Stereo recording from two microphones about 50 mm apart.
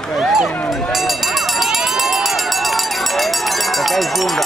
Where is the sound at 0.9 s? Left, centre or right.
Centre.